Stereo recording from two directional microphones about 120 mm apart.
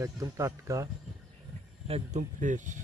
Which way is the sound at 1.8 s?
65° right (ahead or behind).